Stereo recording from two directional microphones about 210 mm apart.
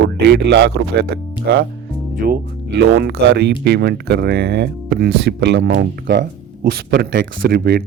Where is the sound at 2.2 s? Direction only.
50° right (ahead or behind).